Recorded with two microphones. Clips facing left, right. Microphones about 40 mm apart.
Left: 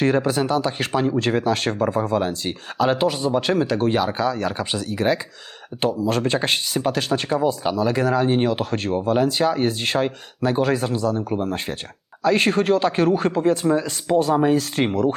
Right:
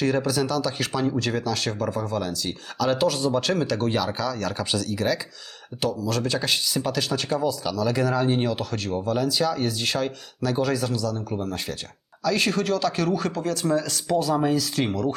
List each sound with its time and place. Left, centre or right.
0.0 s speech: left